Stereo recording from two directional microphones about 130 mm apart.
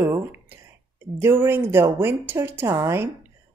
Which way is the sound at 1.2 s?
15° right (ahead or behind).